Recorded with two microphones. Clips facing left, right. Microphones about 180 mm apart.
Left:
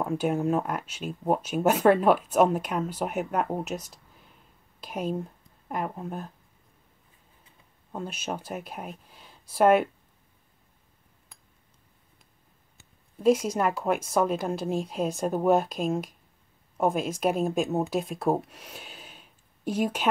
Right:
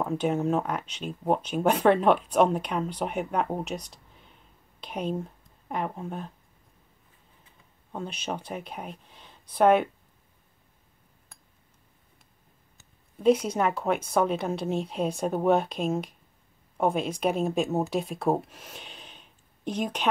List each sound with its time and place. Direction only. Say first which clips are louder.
0.0 s speech: even; 5° left (ahead or behind)
7.9 s speech: even; 5° left (ahead or behind)
13.2 s speech: even; 5° left (ahead or behind)